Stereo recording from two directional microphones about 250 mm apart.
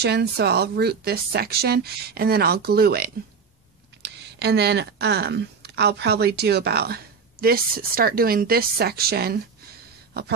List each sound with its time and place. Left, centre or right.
0.0 s speech: right